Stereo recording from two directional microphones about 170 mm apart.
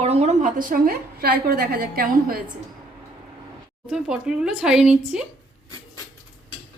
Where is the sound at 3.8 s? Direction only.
5° right (ahead or behind).